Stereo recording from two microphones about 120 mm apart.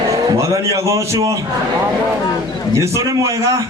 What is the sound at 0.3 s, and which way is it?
A man's voice, 25° right (ahead or behind).